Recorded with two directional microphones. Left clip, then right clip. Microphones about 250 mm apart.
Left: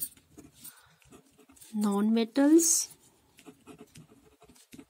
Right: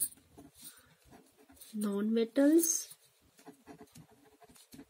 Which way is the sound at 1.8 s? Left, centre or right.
Left.